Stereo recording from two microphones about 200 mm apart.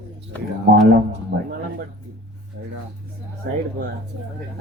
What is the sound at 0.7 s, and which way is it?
Speech, 55° right (ahead or behind).